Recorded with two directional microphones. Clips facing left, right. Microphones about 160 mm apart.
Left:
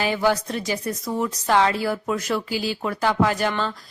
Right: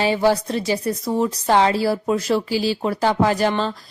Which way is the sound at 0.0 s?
30° right (ahead or behind).